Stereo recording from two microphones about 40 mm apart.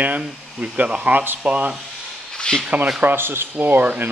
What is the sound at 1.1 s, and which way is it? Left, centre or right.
Speech, right.